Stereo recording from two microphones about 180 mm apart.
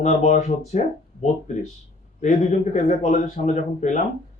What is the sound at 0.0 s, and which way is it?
Speech, 40° left (ahead or behind).